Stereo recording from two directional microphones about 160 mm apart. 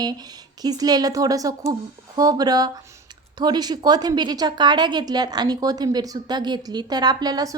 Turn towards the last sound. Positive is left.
turn(degrees=-25)  # may be behind; listen again after turning